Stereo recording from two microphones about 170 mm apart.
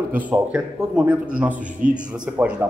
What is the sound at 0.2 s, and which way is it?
A man's voice, 5° right (ahead or behind).